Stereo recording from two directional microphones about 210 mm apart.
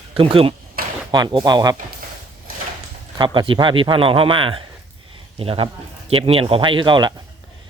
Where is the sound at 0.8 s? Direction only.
45° right (ahead or behind).